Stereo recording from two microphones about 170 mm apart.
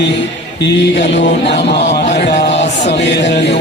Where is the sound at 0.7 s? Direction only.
90° left.